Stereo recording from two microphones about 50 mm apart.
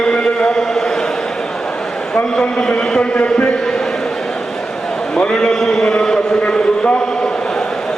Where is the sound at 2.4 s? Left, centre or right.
Centre.